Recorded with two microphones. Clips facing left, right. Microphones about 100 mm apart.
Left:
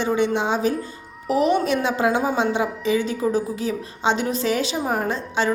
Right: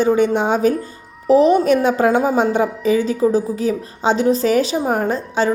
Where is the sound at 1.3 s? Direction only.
35° right (ahead or behind).